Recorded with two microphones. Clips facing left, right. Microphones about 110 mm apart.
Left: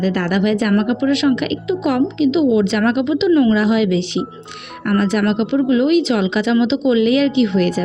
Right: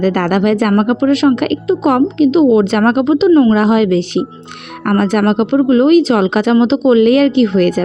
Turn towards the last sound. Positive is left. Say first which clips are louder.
# right 4 dB
turn(degrees=-50)  # may be behind; listen again after turning